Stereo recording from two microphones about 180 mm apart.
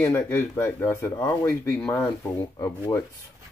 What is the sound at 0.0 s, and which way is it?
Speech, 10° left (ahead or behind).